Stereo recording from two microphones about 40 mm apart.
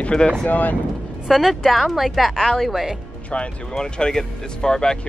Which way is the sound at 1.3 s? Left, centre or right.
Centre.